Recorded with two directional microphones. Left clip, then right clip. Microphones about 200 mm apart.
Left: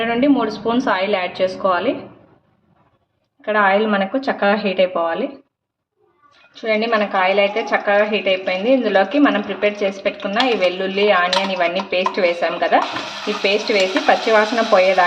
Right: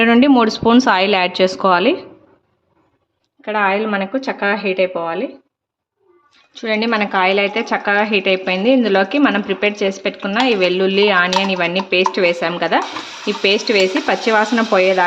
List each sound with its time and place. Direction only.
0.0 s speech: 50° right (ahead or behind)
3.4 s a woman's voice: 25° right (ahead or behind)
6.5 s a woman's voice: 35° right (ahead or behind)